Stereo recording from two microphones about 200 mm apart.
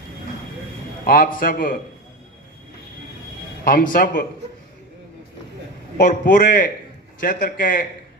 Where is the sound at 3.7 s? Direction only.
45° left (ahead or behind).